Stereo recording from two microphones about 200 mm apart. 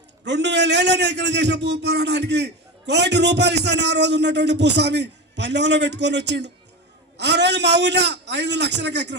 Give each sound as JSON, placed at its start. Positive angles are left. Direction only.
{"t": 0.3, "sound": "a man's voice", "side_deg": -60}